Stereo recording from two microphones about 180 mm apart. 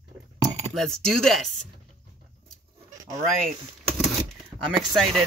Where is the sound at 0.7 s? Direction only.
Centre (ahead or behind).